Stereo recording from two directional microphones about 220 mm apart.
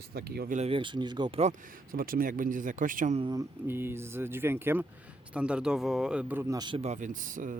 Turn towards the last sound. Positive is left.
turn(degrees=-35)  # may be behind; listen again after turning